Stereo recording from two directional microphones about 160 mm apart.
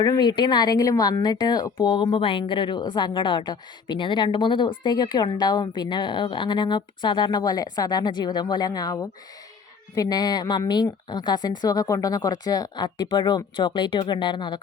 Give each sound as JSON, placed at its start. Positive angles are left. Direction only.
{"t": 0.0, "sound": "speech", "side_deg": 25}